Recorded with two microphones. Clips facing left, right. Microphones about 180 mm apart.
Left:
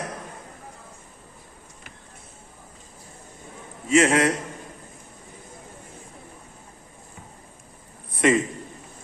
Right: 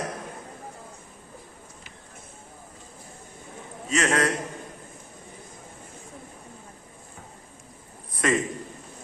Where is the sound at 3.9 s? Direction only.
25° left (ahead or behind).